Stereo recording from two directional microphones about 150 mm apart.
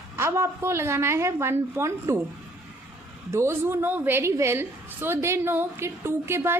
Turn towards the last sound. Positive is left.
turn(degrees=-15)  # may be behind; listen again after turning